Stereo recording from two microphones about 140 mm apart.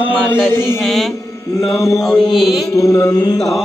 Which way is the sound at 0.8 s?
Centre (ahead or behind).